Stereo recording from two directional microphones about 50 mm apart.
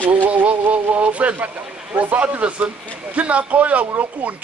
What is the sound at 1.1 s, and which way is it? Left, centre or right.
A man's voice, right.